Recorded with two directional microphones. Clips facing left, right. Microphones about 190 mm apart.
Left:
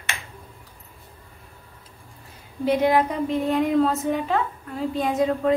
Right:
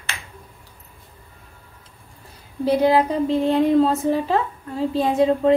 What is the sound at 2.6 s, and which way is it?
Speech, 35° right (ahead or behind).